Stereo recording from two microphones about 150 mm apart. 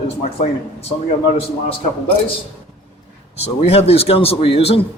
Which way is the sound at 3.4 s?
40° left (ahead or behind).